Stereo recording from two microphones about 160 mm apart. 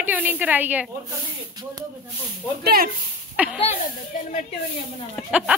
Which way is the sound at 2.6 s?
70° right (ahead or behind).